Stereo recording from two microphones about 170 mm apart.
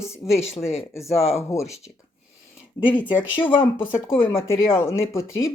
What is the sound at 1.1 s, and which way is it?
Speech, 35° left (ahead or behind).